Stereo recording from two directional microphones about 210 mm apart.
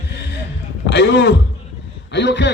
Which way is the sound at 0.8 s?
60° left (ahead or behind).